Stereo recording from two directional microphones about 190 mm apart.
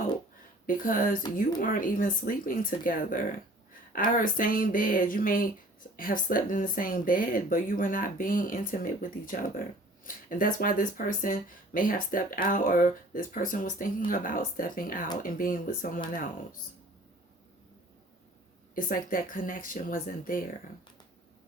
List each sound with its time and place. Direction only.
0.7 s speech: 45° left (ahead or behind)
18.7 s speech: 45° left (ahead or behind)